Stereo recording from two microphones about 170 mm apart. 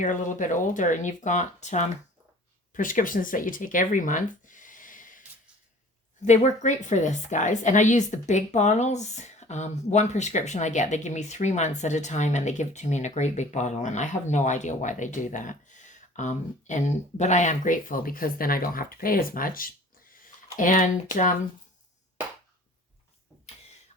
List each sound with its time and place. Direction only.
0.0 s a woman's voice: 50° left (ahead or behind)
6.2 s a woman's voice: 45° left (ahead or behind)